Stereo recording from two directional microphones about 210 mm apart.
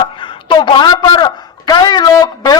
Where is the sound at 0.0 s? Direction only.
20° left (ahead or behind).